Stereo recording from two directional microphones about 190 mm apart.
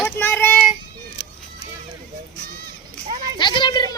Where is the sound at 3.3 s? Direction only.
25° left (ahead or behind).